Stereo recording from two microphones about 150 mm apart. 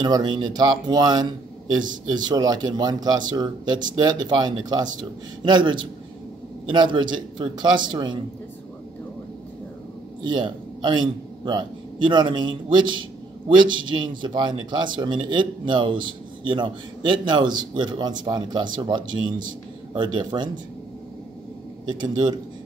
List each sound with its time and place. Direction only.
0.0 s a man's voice: 30° right (ahead or behind)
10.2 s a man's voice: 30° right (ahead or behind)
21.8 s speech: 30° right (ahead or behind)